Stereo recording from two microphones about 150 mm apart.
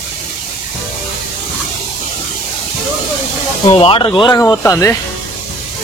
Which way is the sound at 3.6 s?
40° left (ahead or behind).